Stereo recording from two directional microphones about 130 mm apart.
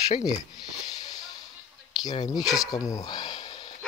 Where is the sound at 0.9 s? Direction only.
30° left (ahead or behind).